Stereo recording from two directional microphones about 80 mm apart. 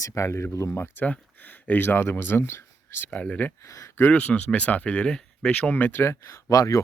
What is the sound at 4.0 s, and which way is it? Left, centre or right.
Speech, centre.